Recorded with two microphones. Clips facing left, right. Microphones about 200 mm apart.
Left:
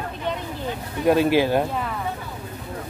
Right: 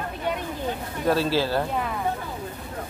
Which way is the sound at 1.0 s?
15° left (ahead or behind).